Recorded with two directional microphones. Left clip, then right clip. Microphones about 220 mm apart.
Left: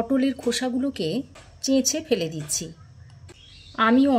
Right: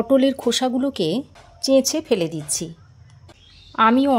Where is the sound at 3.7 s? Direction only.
30° right (ahead or behind).